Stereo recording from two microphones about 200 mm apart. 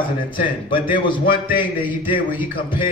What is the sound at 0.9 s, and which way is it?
Speech, 25° left (ahead or behind).